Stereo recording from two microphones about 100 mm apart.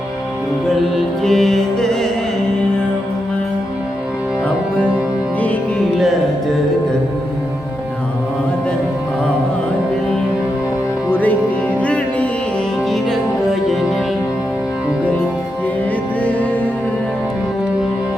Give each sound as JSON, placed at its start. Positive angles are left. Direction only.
{"t": 1.2, "sound": "music", "side_deg": 5}
{"t": 11.1, "sound": "music", "side_deg": 15}
{"t": 12.9, "sound": "music", "side_deg": 0}